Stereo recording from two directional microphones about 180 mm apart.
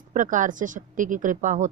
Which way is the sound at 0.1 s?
45° right (ahead or behind).